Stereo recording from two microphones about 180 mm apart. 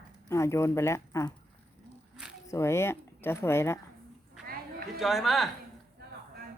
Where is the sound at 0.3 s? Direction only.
15° left (ahead or behind).